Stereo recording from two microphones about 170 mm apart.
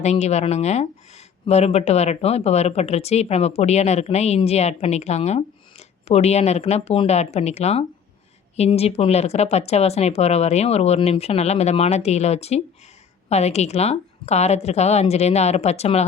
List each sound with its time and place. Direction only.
0.0 s speech: 40° left (ahead or behind)